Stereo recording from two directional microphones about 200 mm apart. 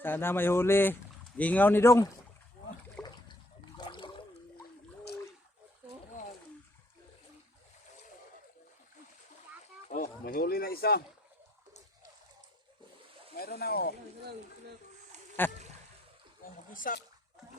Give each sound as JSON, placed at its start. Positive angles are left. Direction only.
{"t": 0.0, "sound": "speech", "side_deg": 10}
{"t": 3.0, "sound": "trickle", "side_deg": 5}
{"t": 3.8, "sound": "a sound", "side_deg": 25}
{"t": 9.9, "sound": "a sound", "side_deg": 45}
{"t": 13.6, "sound": "speech", "side_deg": 50}
{"t": 15.4, "sound": "speech", "side_deg": 10}
{"t": 16.7, "sound": "speech", "side_deg": 40}